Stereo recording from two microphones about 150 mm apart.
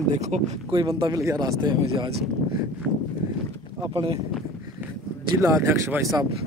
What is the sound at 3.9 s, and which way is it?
Speech, 40° right (ahead or behind).